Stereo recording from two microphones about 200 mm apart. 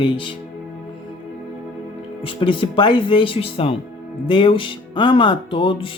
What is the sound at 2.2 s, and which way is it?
Speech, 25° left (ahead or behind).